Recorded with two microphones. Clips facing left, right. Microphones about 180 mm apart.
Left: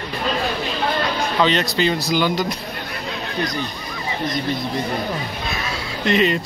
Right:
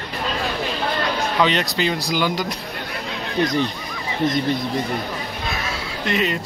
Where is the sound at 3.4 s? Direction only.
25° right (ahead or behind).